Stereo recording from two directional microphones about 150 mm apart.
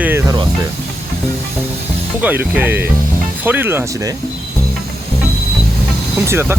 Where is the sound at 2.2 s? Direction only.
10° right (ahead or behind).